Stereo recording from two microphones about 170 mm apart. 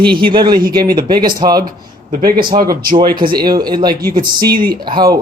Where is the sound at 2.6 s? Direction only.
60° right (ahead or behind).